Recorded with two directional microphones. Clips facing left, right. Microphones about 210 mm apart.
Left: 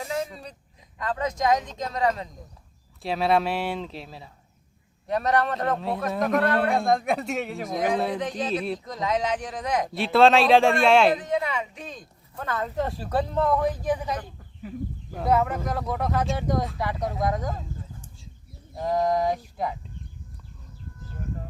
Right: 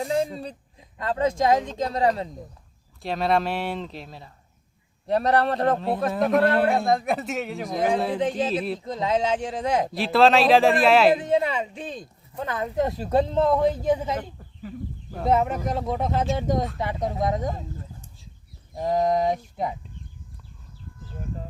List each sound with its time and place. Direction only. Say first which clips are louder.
0.0 s a sound: right 5 dB; 35° right (ahead or behind)
0.9 s speech: right 5 dB; 30° right (ahead or behind)
3.0 s speech: even; centre (ahead or behind)
5.0 s speech: right 3 dB; 35° right (ahead or behind)
6.1 s speech: right 3 dB; centre (ahead or behind)
8.2 s speech: right 3 dB; 30° right (ahead or behind)
9.9 s speech: left 1 dB; centre (ahead or behind)
11.2 s speech: right 4 dB; 30° right (ahead or behind)
12.5 s speech: right 2 dB; 15° right (ahead or behind)
15.3 s speech: right 1 dB; 20° right (ahead or behind)
18.8 s speech: right 2 dB; 20° right (ahead or behind)